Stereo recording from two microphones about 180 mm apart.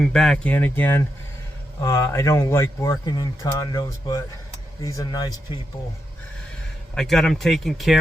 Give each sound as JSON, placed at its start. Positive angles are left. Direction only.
{"t": 0.0, "sound": "speech", "side_deg": 5}
{"t": 6.9, "sound": "speech", "side_deg": 5}